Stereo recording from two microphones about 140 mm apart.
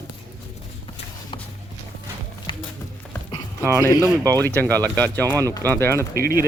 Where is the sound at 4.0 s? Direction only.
25° right (ahead or behind).